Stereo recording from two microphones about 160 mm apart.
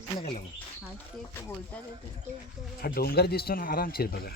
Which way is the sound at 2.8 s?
70° left (ahead or behind).